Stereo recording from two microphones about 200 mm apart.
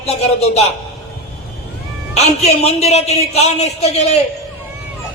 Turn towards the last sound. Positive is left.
turn(degrees=35)  # may be behind; listen again after turning